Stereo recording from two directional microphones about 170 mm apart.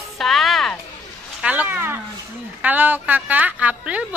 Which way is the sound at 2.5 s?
10° right (ahead or behind).